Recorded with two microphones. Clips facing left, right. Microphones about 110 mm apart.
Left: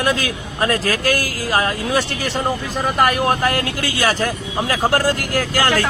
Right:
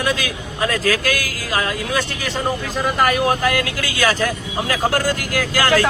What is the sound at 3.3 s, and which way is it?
Speech, 30° left (ahead or behind).